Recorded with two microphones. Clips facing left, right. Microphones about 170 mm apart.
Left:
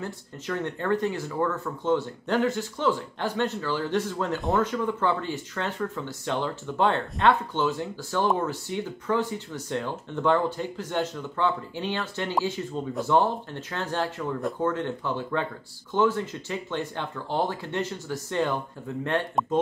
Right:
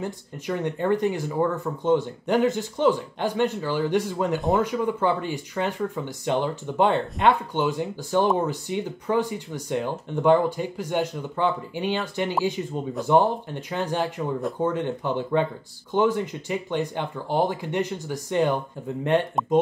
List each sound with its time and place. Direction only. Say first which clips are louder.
0.0 s speech: right 3 dB; 15° right (ahead or behind)